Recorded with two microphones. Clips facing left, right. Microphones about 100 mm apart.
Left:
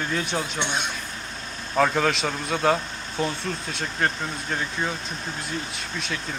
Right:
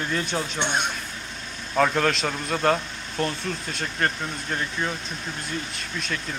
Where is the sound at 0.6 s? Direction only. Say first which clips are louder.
Right 2 dB; 50° right (ahead or behind).